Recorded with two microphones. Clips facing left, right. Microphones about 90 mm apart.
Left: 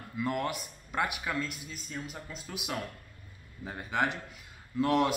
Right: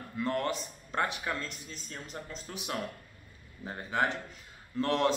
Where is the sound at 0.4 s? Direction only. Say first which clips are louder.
Right 1 dB; 10° left (ahead or behind).